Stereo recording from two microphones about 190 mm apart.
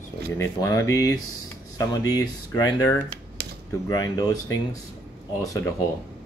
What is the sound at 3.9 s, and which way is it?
Speech, 20° left (ahead or behind).